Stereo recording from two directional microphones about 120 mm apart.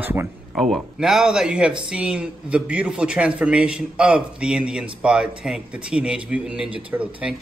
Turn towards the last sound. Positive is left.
turn(degrees=-10)  # may be behind; listen again after turning